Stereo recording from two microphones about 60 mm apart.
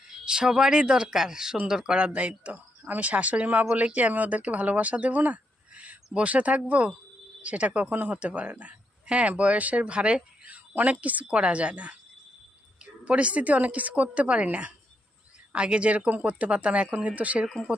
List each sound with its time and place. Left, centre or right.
0.3 s speech: centre
2.0 s speech: right